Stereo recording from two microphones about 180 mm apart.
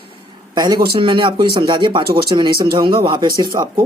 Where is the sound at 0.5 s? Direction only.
20° right (ahead or behind).